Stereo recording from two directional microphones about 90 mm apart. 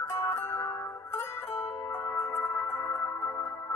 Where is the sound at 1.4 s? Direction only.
90° left.